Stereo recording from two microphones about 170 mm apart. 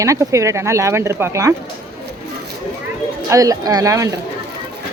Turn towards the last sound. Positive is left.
turn(degrees=-20)  # may be behind; listen again after turning